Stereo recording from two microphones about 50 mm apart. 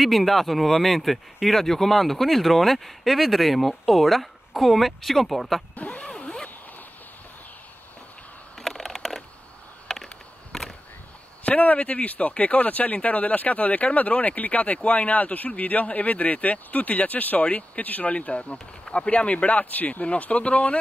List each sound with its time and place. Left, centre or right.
0.0 s speech: centre
5.8 s vehicle: left
8.5 s a sound: centre
11.4 s speech: left